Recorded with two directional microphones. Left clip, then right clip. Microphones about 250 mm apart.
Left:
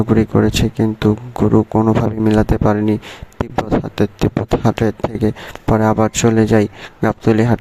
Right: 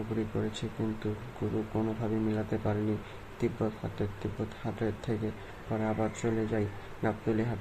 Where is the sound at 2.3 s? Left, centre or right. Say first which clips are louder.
Left 18 dB; left.